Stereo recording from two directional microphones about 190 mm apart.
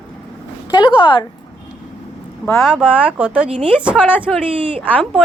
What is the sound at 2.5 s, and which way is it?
Speech, 5° right (ahead or behind).